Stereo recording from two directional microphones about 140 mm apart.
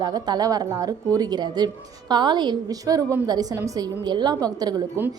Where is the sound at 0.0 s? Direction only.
30° right (ahead or behind).